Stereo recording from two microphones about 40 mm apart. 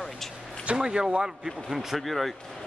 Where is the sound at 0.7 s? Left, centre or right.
Centre.